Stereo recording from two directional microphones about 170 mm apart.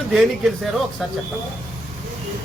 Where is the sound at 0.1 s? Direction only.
Centre (ahead or behind).